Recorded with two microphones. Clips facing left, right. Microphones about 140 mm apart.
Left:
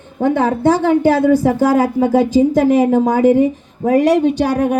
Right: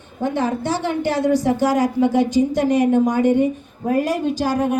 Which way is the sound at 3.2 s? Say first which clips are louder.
Left 5 dB; 90° left.